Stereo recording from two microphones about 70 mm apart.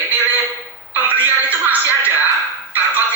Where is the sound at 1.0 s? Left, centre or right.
Right.